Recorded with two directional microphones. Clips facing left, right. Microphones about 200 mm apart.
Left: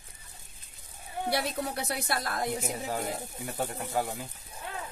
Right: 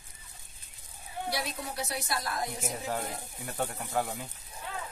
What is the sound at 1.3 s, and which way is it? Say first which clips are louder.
A woman's voice: left 6 dB; 60° left (ahead or behind).